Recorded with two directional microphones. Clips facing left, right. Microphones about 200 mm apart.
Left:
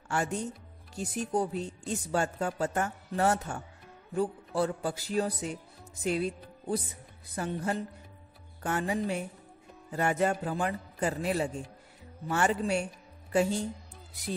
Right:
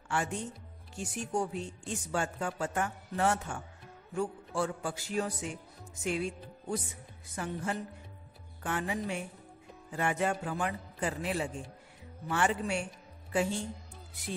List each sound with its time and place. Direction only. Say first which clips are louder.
0.1 s speech: left 3 dB; 40° left (ahead or behind)